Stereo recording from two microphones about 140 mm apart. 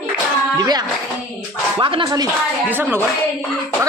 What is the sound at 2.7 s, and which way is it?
Speech, 15° right (ahead or behind).